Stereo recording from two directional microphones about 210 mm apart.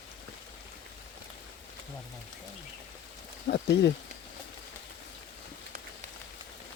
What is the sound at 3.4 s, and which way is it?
Speech, 50° left (ahead or behind).